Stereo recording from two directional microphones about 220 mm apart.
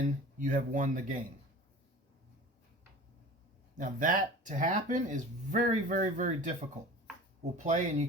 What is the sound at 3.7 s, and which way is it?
Speech, 40° right (ahead or behind).